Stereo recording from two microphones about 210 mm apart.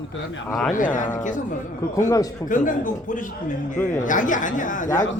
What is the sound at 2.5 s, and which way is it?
A man's voice, 40° left (ahead or behind).